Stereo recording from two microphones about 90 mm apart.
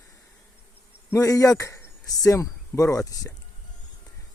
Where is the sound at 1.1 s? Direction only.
40° left (ahead or behind).